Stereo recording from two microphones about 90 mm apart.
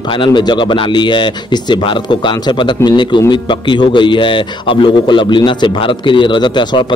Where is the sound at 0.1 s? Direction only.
65° left (ahead or behind).